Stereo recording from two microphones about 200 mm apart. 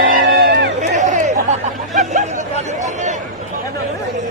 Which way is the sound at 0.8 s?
35° right (ahead or behind).